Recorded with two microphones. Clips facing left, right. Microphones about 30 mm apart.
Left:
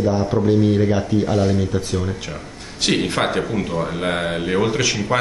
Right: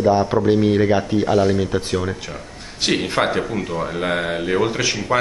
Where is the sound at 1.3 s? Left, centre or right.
Centre.